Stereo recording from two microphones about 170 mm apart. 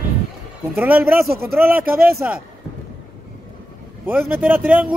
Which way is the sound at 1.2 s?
65° right (ahead or behind).